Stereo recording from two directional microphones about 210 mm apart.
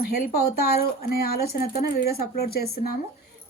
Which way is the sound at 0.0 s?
45° left (ahead or behind).